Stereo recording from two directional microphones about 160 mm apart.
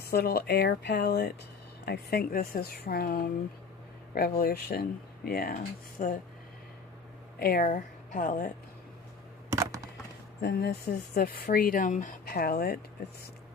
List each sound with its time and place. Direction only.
0.0 s speech: 75° left (ahead or behind)
6.0 s speech: 55° left (ahead or behind)
7.3 s a woman's voice: 65° left (ahead or behind)
9.5 s a sound: 20° right (ahead or behind)
10.4 s speech: 85° left